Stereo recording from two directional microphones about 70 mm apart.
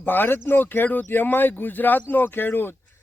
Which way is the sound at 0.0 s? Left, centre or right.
Left.